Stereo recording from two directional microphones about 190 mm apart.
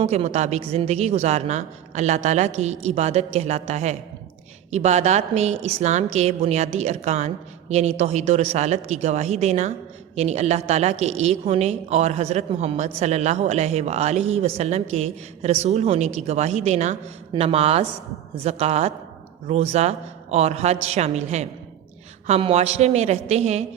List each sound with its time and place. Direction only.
0.0 s a woman's voice: 35° right (ahead or behind)